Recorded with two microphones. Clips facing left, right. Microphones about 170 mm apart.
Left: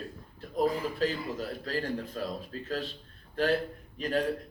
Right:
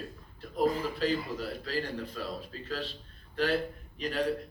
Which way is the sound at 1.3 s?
45° left (ahead or behind).